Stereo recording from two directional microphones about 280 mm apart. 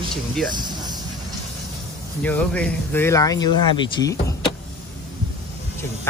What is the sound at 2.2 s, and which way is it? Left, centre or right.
Speech, centre.